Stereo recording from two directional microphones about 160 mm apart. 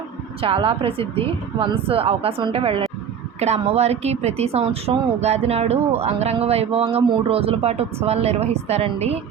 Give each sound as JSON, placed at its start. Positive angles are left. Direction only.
{"t": 0.4, "sound": "speech", "side_deg": -35}